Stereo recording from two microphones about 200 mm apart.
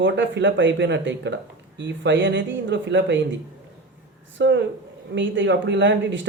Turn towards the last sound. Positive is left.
turn(degrees=-65)  # may be behind; listen again after turning